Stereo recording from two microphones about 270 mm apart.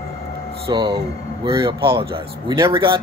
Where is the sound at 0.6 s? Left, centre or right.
Centre.